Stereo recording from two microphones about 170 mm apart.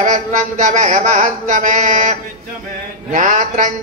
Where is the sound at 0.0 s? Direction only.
45° right (ahead or behind).